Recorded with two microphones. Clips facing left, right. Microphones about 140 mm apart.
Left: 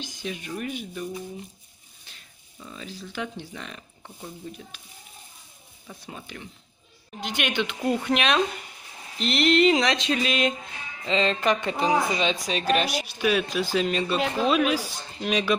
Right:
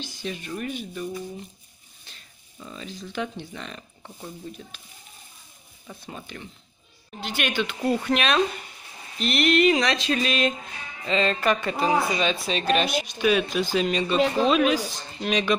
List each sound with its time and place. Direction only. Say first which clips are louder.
0.0 s speech: right 1 dB; 15° left (ahead or behind)
2.6 s speech: right 1 dB; centre (ahead or behind)
5.9 s speech: right 1 dB; 5° left (ahead or behind)
7.2 s speech: even; 15° left (ahead or behind)
9.2 s a sound: even; 25° left (ahead or behind)
11.1 s speech: even; 20° left (ahead or behind)